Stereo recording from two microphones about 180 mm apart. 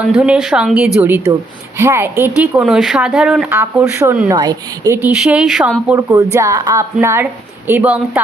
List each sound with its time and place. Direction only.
0.0 s a woman's voice: 5° right (ahead or behind)